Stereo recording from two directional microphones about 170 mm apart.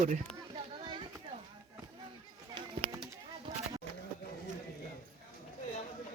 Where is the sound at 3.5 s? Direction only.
30° right (ahead or behind).